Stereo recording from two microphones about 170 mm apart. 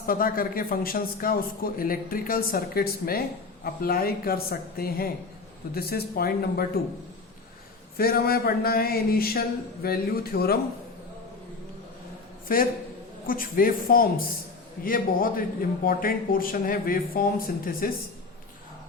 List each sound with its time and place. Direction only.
0.0 s a man's voice: 60° left (ahead or behind)
7.9 s a man's voice: 65° left (ahead or behind)
12.5 s a man's voice: 55° left (ahead or behind)